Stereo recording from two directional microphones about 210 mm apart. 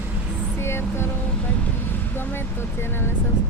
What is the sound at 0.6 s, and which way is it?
Music, 10° left (ahead or behind).